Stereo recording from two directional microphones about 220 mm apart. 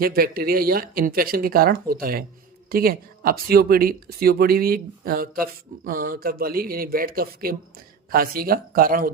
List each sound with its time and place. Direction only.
0.0 s speech: 40° right (ahead or behind)